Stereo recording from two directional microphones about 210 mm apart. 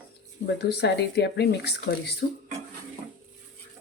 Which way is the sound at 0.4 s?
55° left (ahead or behind).